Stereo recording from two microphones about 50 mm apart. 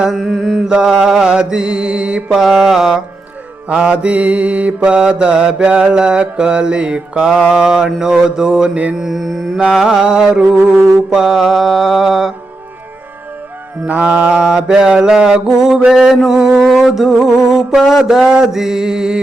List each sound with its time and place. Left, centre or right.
0.0 s mantra: centre
0.3 s mantra: centre
0.6 s mantra: centre
2.3 s mantra: centre
3.7 s mantra: centre
9.0 s mantra: centre
9.7 s mantra: centre
13.8 s mantra: right; by 19.2 s centre